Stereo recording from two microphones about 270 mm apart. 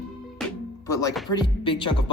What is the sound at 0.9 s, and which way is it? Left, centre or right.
Music, centre.